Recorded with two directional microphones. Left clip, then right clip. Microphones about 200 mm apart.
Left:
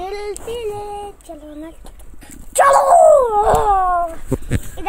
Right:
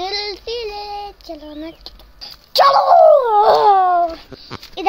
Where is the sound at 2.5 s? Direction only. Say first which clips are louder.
Even; 5° right (ahead or behind).